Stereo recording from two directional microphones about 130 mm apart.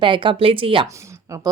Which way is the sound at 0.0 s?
40° right (ahead or behind).